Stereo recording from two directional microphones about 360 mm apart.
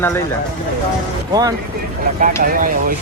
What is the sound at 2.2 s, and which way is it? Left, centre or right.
Speech, right.